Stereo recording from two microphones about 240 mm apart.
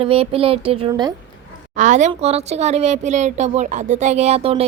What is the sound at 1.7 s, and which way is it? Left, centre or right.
Speech, right.